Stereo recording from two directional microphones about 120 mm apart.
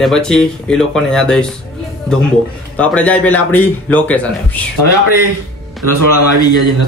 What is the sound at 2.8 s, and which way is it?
A man's voice, 10° left (ahead or behind).